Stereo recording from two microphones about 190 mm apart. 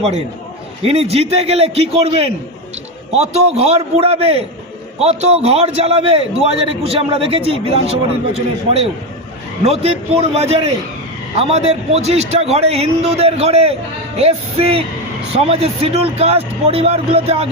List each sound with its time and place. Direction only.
0.9 s a man's voice: 30° right (ahead or behind)